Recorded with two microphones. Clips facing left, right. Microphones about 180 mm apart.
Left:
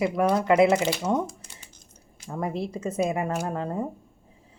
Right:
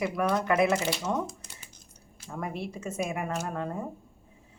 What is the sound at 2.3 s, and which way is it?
Speech, 30° left (ahead or behind).